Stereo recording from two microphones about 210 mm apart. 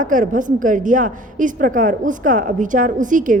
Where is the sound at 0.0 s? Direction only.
40° right (ahead or behind).